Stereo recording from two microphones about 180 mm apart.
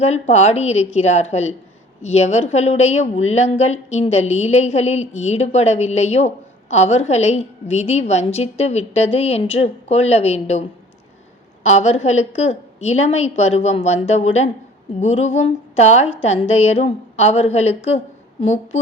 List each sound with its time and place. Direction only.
0.0 s a woman's voice: 40° left (ahead or behind)